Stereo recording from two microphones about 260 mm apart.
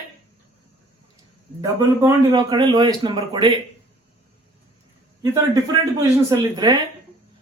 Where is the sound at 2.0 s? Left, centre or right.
Centre.